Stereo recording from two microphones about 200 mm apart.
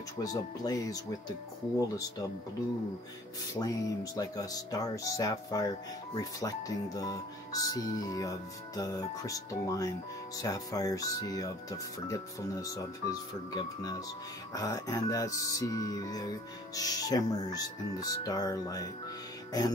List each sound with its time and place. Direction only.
0.2 s speech: 20° left (ahead or behind)
3.5 s speech: 15° left (ahead or behind)